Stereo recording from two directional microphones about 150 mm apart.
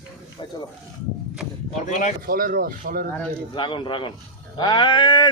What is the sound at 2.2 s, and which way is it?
Speech, 70° right (ahead or behind).